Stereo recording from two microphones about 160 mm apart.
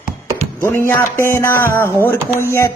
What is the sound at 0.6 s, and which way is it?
Music, 15° left (ahead or behind).